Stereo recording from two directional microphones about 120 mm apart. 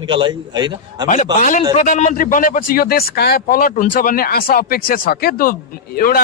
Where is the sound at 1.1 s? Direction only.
90° left.